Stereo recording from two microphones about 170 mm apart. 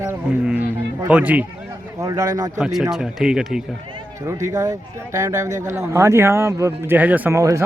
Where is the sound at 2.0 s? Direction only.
20° right (ahead or behind).